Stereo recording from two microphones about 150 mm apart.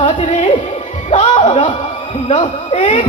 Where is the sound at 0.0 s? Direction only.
45° left (ahead or behind).